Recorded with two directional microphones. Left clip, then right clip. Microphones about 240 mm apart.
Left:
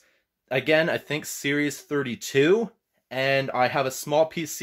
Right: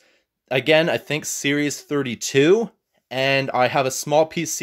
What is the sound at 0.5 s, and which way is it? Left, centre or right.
Speech, right.